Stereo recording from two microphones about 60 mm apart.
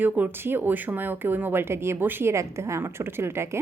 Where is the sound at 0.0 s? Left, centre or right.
Right.